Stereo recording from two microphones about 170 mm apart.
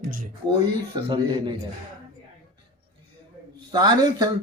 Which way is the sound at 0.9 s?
25° right (ahead or behind).